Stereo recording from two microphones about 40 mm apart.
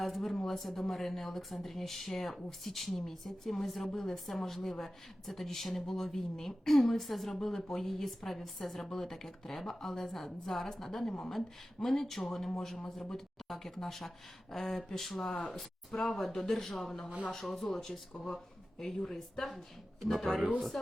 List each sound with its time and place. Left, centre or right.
0.0 s a woman's voice: centre
15.3 s speech: left
15.5 s a woman's voice: centre